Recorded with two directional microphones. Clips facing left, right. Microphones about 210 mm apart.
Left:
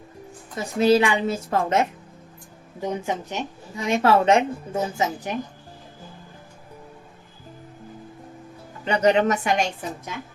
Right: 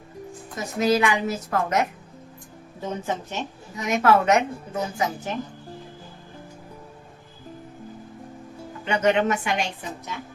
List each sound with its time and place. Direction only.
0.5 s a woman's voice: 30° left (ahead or behind)
2.8 s speech: 15° left (ahead or behind)
3.8 s a woman's voice: 30° left (ahead or behind)
8.8 s a woman's voice: 35° left (ahead or behind)